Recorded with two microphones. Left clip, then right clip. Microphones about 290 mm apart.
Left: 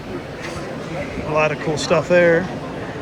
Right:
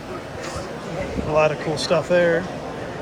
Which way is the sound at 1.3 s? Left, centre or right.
Centre.